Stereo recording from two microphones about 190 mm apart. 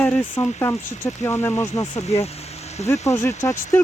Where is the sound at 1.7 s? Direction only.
35° left (ahead or behind).